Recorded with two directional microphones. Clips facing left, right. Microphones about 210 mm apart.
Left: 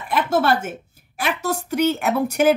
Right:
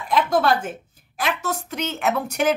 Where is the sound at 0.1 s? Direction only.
5° left (ahead or behind).